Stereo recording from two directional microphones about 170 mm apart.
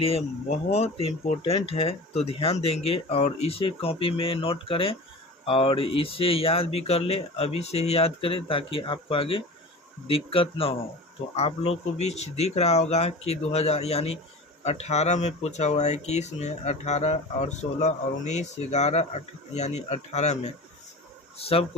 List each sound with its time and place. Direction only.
0.0 s speech: 35° left (ahead or behind)